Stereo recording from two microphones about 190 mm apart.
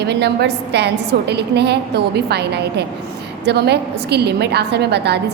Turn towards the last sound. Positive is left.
turn(degrees=-60)  # may be behind; listen again after turning